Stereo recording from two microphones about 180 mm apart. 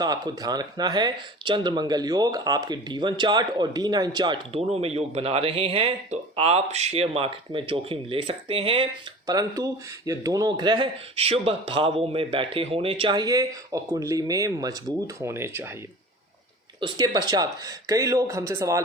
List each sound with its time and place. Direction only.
0.0 s speech: 20° right (ahead or behind)
9.2 s speech: 20° right (ahead or behind)
16.8 s speech: 20° right (ahead or behind)